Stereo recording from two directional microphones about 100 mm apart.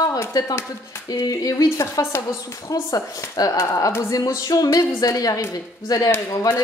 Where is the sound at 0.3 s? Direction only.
40° left (ahead or behind).